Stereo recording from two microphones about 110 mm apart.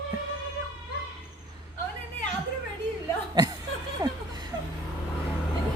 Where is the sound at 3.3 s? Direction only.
35° right (ahead or behind).